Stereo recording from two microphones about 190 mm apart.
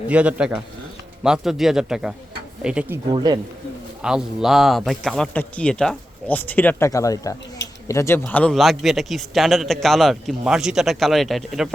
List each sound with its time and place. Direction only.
0.1 s a man's voice: 5° right (ahead or behind)
3.1 s speech: 20° right (ahead or behind)
4.0 s a man's voice: 5° right (ahead or behind)